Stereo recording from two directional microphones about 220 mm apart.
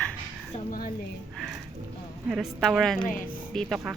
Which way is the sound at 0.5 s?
40° left (ahead or behind).